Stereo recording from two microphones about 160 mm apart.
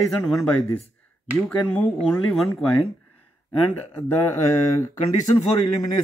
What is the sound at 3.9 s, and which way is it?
Speech, 15° left (ahead or behind).